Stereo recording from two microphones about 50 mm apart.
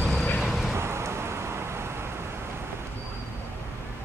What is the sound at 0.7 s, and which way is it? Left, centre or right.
Vehicle, right.